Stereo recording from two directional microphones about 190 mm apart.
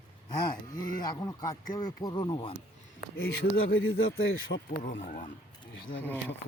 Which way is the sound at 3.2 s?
90° left.